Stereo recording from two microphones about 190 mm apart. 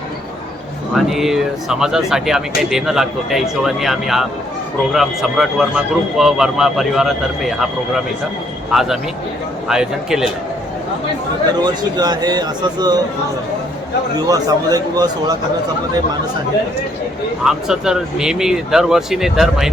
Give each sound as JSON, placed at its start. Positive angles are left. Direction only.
{"t": 0.9, "sound": "speech", "side_deg": 0}
{"t": 11.6, "sound": "speech", "side_deg": -20}
{"t": 14.3, "sound": "speech", "side_deg": -20}
{"t": 17.4, "sound": "speech", "side_deg": -5}